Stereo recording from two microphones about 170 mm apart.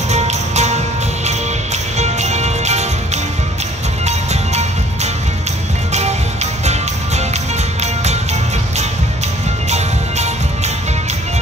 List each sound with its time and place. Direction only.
0.1 s music: 40° right (ahead or behind)
2.0 s music: 40° right (ahead or behind)
4.0 s music: 40° right (ahead or behind)
9.7 s music: 40° right (ahead or behind)